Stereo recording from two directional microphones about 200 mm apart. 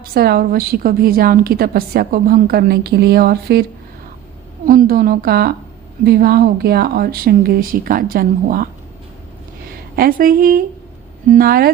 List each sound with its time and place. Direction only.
0.1 s a woman's voice: 50° right (ahead or behind)
9.9 s a woman's voice: 45° right (ahead or behind)